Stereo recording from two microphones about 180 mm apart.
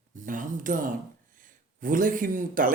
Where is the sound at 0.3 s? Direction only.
45° right (ahead or behind).